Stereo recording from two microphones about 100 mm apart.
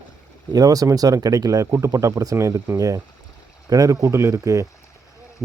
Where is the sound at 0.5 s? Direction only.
35° right (ahead or behind).